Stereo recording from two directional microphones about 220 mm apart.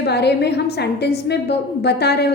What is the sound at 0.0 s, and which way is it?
A woman's voice, 50° left (ahead or behind).